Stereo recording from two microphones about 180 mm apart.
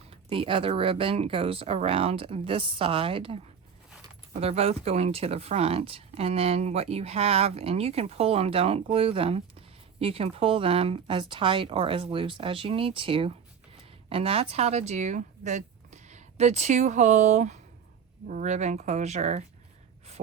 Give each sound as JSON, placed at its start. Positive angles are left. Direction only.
{"t": 0.1, "sound": "speech", "side_deg": -30}